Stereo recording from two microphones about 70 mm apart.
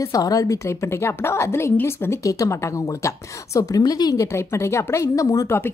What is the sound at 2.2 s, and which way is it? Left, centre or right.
A woman's voice, left.